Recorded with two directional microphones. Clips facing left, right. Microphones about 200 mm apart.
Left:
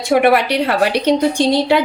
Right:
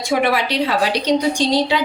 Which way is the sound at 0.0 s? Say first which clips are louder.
Left 5 dB; 60° left (ahead or behind).